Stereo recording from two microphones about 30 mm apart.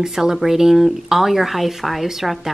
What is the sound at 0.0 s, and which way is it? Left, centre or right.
A woman's voice, centre.